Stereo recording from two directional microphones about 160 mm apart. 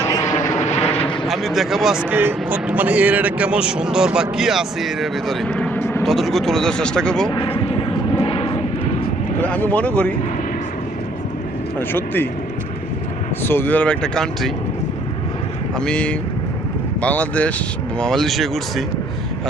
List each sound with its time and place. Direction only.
0.0 s vehicle: 20° left (ahead or behind)
0.5 s vehicle: 45° left (ahead or behind)
0.9 s speech: 5° left (ahead or behind)
7.3 s vehicle: 35° left (ahead or behind)
9.4 s speech: 10° left (ahead or behind)
11.8 s speech: 15° left (ahead or behind)
13.4 s speech: 15° left (ahead or behind)
15.8 s speech: 5° left (ahead or behind)